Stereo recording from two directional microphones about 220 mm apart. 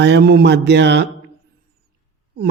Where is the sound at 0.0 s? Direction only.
50° right (ahead or behind).